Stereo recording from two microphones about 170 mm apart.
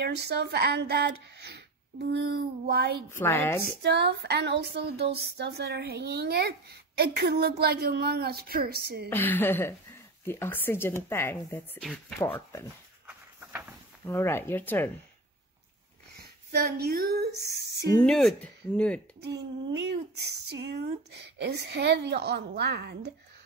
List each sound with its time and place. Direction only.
0.0 s speech: 75° right (ahead or behind)
2.6 s a woman's voice: 65° right (ahead or behind)
3.1 s speech: 15° left (ahead or behind)
3.6 s speech: 75° right (ahead or behind)
9.1 s speech: 10° left (ahead or behind)
13.0 s a sound: 15° right (ahead or behind)
14.0 s speech: 15° left (ahead or behind)
16.5 s speech: 65° right (ahead or behind)
18.0 s speech: 5° left (ahead or behind)
19.2 s speech: 90° right; by 23.1 s 75° right (ahead or behind)